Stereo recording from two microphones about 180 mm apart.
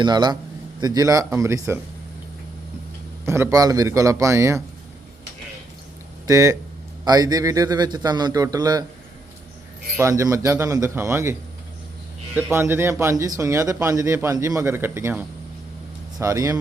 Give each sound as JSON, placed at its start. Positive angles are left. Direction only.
{"t": 0.0, "sound": "a man's voice", "side_deg": -25}
{"t": 3.2, "sound": "speech", "side_deg": -15}
{"t": 6.2, "sound": "a man's voice", "side_deg": -20}
{"t": 10.0, "sound": "speech", "side_deg": -15}
{"t": 12.4, "sound": "speech", "side_deg": -10}
{"t": 16.2, "sound": "speech", "side_deg": -15}